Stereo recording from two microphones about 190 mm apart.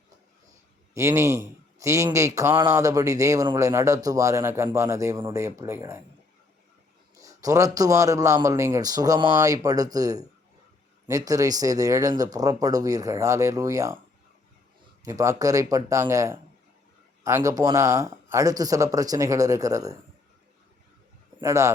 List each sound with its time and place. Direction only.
0.9 s a man's voice: 15° right (ahead or behind)
7.2 s a man's voice: 15° right (ahead or behind)
15.0 s a man's voice: 15° right (ahead or behind)
21.4 s a man's voice: 15° right (ahead or behind)